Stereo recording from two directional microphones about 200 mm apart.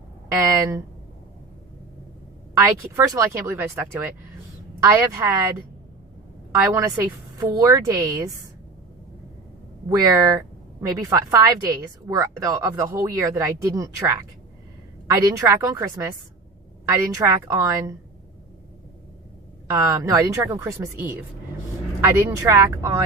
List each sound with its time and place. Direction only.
2.6 s a woman's voice: 15° right (ahead or behind)
10.0 s a woman's voice: 15° right (ahead or behind)
19.6 s a woman's voice: 15° right (ahead or behind)